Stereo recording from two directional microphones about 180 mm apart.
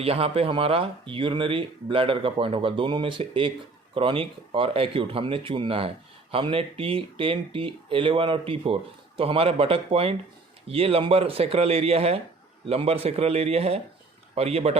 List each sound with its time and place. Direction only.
0.0 s speech: 30° right (ahead or behind)